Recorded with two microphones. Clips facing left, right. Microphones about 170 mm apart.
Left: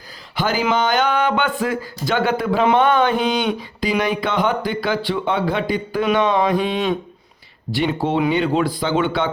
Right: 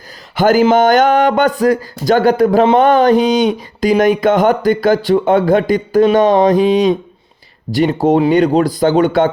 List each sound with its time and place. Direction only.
0.3 s speech: 45° right (ahead or behind)
7.7 s speech: 40° right (ahead or behind)